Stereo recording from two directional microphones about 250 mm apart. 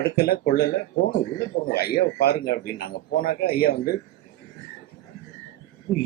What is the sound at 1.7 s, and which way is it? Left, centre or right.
Speech, left.